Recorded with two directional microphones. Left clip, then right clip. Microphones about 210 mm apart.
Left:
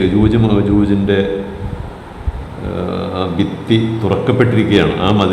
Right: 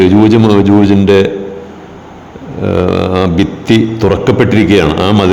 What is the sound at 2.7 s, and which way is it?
A man's voice, 35° right (ahead or behind).